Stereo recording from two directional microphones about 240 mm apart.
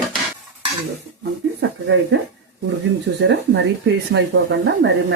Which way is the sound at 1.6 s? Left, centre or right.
Right.